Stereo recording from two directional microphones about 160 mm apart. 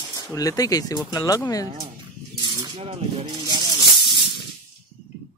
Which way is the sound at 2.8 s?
40° right (ahead or behind).